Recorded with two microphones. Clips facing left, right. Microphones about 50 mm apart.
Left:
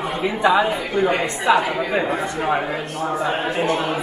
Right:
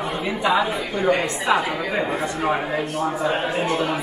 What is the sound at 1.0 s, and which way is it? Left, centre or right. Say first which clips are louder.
Speech: even; left.